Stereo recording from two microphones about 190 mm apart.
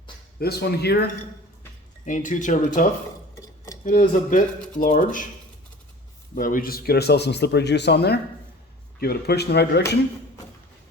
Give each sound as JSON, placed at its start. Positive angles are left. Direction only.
{"t": 0.3, "sound": "speech", "side_deg": 55}
{"t": 2.0, "sound": "speech", "side_deg": 40}
{"t": 6.3, "sound": "speech", "side_deg": 50}